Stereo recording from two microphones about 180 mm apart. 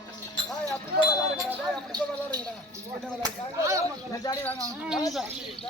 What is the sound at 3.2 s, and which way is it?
Speech, 20° right (ahead or behind).